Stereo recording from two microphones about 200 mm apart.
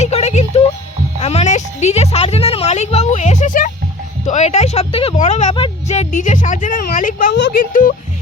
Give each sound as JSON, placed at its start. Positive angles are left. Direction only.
{"t": 0.0, "sound": "music", "side_deg": 35}
{"t": 1.2, "sound": "speech", "side_deg": 35}